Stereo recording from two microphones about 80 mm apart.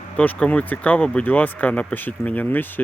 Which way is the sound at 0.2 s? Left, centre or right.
Centre.